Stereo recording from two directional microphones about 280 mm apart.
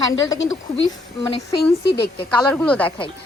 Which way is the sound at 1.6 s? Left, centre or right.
Left.